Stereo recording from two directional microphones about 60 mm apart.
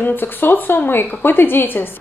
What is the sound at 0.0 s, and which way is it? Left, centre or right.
A woman's voice, left.